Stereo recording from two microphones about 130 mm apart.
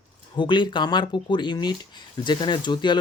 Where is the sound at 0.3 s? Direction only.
35° left (ahead or behind).